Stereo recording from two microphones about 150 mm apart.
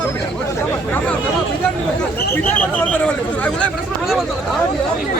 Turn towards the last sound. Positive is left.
turn(degrees=10)  # may be behind; listen again after turning